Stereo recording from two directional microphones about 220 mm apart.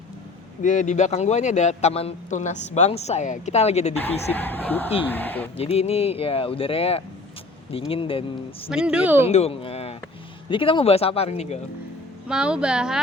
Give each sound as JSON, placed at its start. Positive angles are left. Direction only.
{"t": 0.6, "sound": "a man's voice", "side_deg": 35}
{"t": 4.3, "sound": "speech", "side_deg": 10}
{"t": 5.5, "sound": "speech", "side_deg": 30}
{"t": 8.7, "sound": "speech", "side_deg": -5}
{"t": 9.3, "sound": "speech", "side_deg": 25}
{"t": 12.3, "sound": "speech", "side_deg": -5}